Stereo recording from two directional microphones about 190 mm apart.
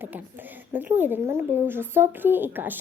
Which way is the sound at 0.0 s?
10° right (ahead or behind).